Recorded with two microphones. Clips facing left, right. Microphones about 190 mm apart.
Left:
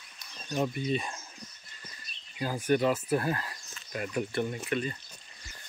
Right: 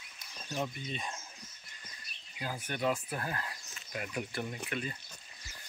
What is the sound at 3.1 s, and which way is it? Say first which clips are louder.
Speech: left 9 dB; 35° left (ahead or behind).